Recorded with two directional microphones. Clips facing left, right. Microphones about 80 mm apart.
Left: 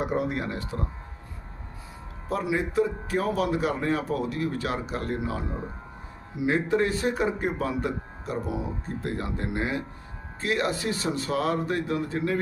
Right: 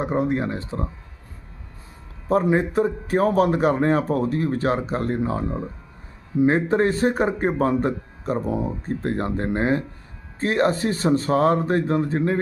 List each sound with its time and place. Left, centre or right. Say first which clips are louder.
0.0 s speech: right 5 dB; right
2.3 s speech: right 7 dB; right